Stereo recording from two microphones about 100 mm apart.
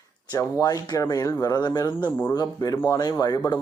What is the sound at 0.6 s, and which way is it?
Speech, 40° left (ahead or behind).